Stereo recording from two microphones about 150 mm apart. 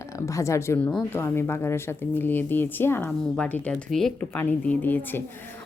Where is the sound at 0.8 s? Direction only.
10° left (ahead or behind).